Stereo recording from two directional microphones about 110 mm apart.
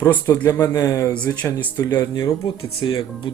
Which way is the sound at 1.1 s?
15° left (ahead or behind).